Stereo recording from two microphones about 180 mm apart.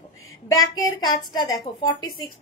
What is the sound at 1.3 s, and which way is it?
Speech, 20° left (ahead or behind).